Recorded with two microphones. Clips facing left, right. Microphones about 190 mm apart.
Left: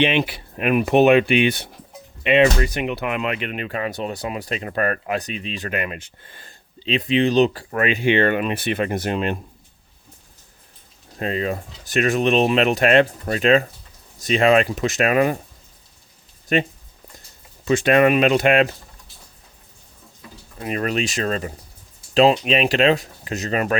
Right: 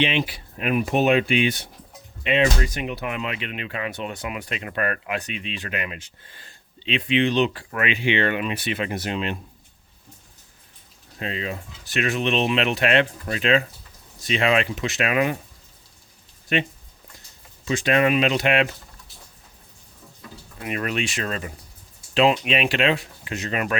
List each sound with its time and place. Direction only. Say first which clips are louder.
0.0 s speech: left 4 dB; 60° left (ahead or behind)
11.2 s speech: left 6 dB; 45° left (ahead or behind)
16.5 s speech: left 4 dB; 40° left (ahead or behind)
17.7 s speech: left 5 dB; 55° left (ahead or behind)
20.6 s speech: left 4 dB; 35° left (ahead or behind)